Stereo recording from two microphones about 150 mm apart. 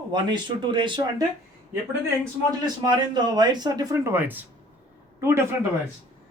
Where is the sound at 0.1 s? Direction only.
30° right (ahead or behind).